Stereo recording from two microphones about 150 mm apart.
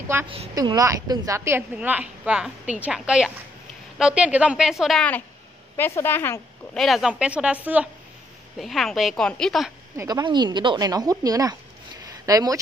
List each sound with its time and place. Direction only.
0.6 s a woman's voice: 25° right (ahead or behind); by 5.2 s 5° left (ahead or behind)
5.8 s a woman's voice: 15° left (ahead or behind)
6.8 s a woman's voice: centre (ahead or behind)
8.5 s a woman's voice: centre (ahead or behind)
9.9 s a woman's voice: 25° right (ahead or behind)